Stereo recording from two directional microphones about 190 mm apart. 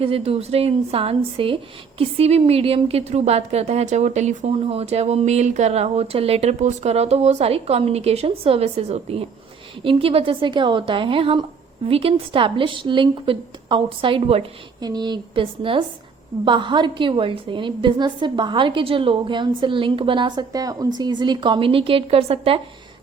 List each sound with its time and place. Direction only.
0.0 s a woman's voice: 30° right (ahead or behind)